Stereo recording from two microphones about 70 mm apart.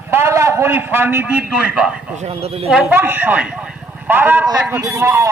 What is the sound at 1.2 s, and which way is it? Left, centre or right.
Speech, centre.